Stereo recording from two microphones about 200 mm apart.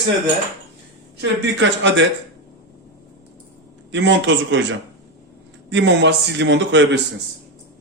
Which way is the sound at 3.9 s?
65° right (ahead or behind).